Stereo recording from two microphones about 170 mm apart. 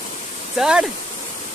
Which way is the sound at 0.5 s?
5° right (ahead or behind).